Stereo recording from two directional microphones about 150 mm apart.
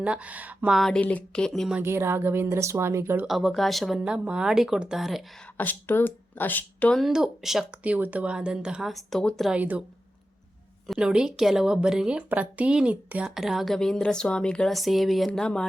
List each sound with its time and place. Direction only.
0.0 s a woman's voice: 10° right (ahead or behind)
1.7 s speech: 15° right (ahead or behind)
3.2 s a woman's voice: centre (ahead or behind)
5.5 s speech: 10° left (ahead or behind)
7.0 s a woman's voice: centre (ahead or behind)
9.6 s speech: 10° right (ahead or behind)
10.8 s a woman's voice: 5° right (ahead or behind)